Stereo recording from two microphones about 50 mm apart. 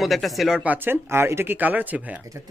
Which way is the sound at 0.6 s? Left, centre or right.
Right.